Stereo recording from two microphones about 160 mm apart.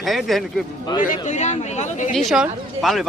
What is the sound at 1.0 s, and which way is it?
Speech, 50° left (ahead or behind).